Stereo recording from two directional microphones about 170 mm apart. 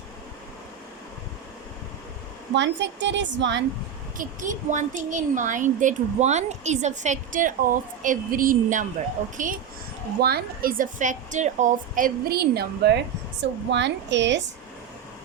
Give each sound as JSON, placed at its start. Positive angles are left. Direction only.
{"t": 2.6, "sound": "a woman's voice", "side_deg": -90}
{"t": 4.2, "sound": "speech", "side_deg": -50}
{"t": 10.2, "sound": "a woman's voice", "side_deg": -65}
{"t": 13.4, "sound": "a woman's voice", "side_deg": -90}